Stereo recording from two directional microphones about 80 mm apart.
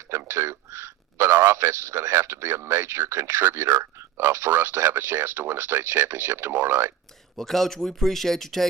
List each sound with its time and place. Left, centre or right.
0.1 s speech: right
7.3 s speech: centre